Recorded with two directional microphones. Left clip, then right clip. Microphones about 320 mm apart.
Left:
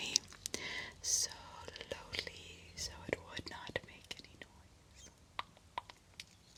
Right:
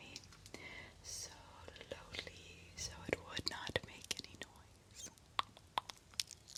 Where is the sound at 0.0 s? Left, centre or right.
Left; by 4.4 s centre.